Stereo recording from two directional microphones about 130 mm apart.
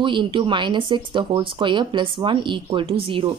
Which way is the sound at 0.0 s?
40° right (ahead or behind).